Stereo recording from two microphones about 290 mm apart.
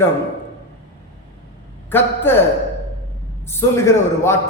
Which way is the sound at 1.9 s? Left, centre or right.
Centre.